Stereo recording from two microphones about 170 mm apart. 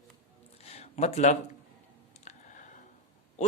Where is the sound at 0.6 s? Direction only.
40° left (ahead or behind).